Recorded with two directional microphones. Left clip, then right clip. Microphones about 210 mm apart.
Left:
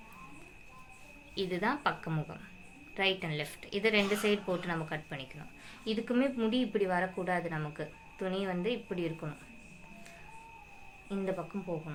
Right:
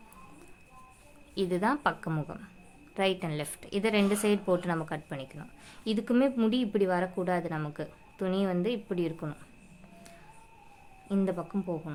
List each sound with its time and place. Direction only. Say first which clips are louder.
1.4 s a woman's voice: right 4 dB; 45° right (ahead or behind)